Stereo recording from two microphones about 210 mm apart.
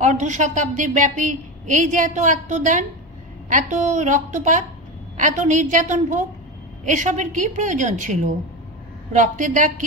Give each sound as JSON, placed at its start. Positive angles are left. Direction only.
{"t": 0.0, "sound": "a woman's voice", "side_deg": -35}